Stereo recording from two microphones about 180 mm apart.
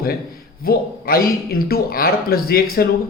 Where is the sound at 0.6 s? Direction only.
55° left (ahead or behind).